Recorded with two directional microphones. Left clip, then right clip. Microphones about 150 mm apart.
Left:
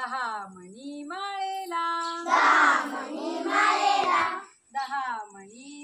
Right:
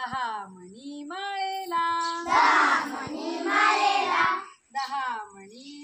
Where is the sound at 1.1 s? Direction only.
35° left (ahead or behind).